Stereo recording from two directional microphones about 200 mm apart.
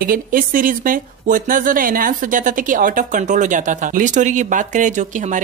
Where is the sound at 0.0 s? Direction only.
45° right (ahead or behind).